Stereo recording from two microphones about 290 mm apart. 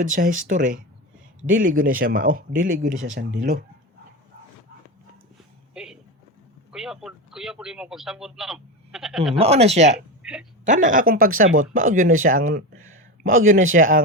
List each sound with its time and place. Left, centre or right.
0.0 s speech: right
5.7 s a sound: centre
6.7 s a man's voice: centre
9.4 s speech: right
10.2 s speech: centre
10.7 s speech: right